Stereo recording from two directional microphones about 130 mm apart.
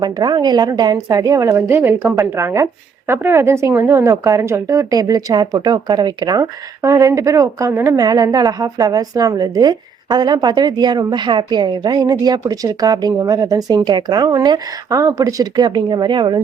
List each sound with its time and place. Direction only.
0.0 s a woman's voice: 30° right (ahead or behind)